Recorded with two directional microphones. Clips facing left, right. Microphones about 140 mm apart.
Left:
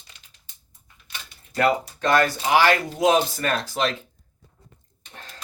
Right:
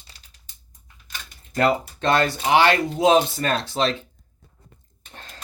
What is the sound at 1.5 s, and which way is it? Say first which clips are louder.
Speech: right 1 dB; 25° right (ahead or behind).